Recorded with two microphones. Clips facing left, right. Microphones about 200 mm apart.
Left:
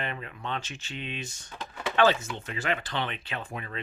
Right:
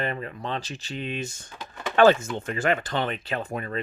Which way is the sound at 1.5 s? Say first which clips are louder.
Even; centre (ahead or behind).